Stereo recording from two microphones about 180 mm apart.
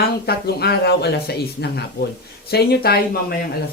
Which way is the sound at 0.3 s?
60° left (ahead or behind).